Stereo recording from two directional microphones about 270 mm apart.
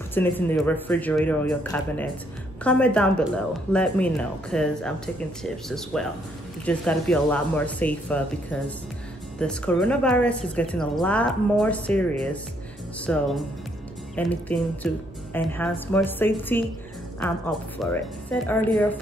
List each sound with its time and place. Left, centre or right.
0.1 s speech: centre